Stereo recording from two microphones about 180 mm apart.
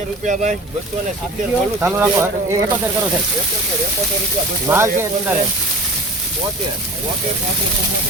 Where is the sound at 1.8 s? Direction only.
10° right (ahead or behind).